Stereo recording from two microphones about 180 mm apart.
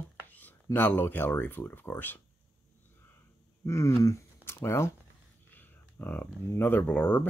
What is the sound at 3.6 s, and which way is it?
Speech, 15° left (ahead or behind).